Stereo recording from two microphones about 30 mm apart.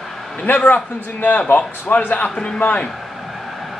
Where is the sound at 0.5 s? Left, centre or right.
Left.